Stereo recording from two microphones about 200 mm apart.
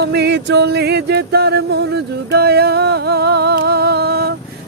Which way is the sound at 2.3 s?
55° right (ahead or behind).